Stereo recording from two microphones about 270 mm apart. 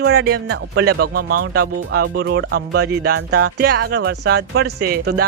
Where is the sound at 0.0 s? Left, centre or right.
Right.